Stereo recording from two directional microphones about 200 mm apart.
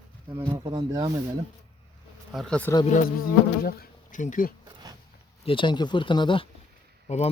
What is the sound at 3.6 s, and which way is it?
Speech, 45° left (ahead or behind).